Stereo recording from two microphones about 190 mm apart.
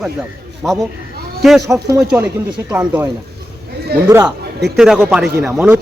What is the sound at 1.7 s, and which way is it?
A man's voice, 15° right (ahead or behind).